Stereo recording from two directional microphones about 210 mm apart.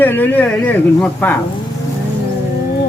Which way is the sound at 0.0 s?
10° left (ahead or behind).